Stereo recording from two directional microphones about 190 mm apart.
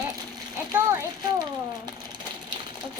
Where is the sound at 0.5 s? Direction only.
15° right (ahead or behind).